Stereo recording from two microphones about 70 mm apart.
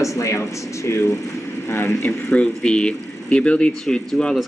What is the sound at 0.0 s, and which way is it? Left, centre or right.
A man's voice, left.